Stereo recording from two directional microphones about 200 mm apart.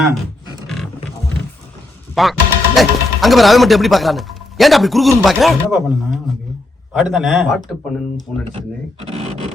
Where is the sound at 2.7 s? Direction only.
Centre (ahead or behind).